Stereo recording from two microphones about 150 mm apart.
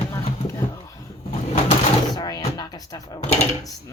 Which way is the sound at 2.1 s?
25° left (ahead or behind).